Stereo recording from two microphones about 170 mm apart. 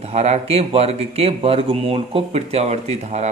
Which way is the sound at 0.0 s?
40° right (ahead or behind).